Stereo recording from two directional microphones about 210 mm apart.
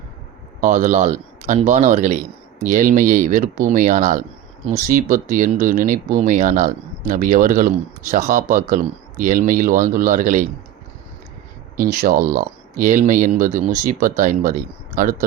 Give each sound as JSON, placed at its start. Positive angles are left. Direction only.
{"t": 0.6, "sound": "speech", "side_deg": -35}
{"t": 11.9, "sound": "speech", "side_deg": -40}